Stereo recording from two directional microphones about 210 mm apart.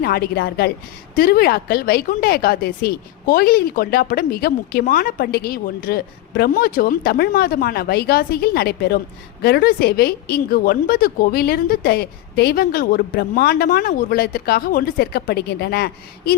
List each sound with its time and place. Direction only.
0.0 s a woman's voice: 45° left (ahead or behind)